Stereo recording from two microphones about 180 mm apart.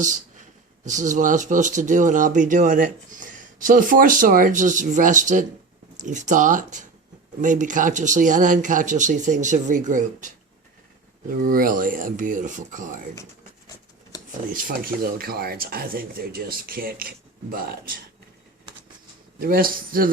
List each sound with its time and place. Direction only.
0.0 s speech: 45° right (ahead or behind)
14.5 s speech: 55° right (ahead or behind)
19.4 s speech: 55° right (ahead or behind)